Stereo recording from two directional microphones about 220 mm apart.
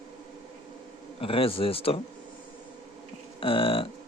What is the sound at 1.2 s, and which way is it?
Speech, 25° left (ahead or behind).